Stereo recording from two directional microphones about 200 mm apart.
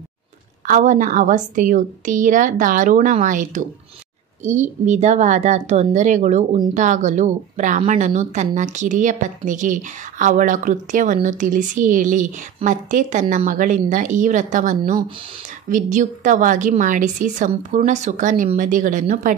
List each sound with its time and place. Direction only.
0.7 s a woman's voice: 40° right (ahead or behind)